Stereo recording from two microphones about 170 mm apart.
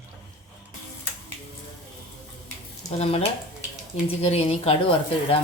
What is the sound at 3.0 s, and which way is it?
Speech, 35° left (ahead or behind).